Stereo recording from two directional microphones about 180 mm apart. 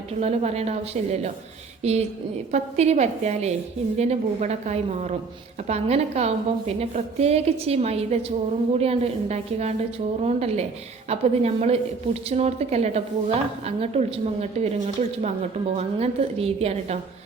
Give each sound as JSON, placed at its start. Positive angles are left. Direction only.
{"t": 0.2, "sound": "a woman's voice", "side_deg": -35}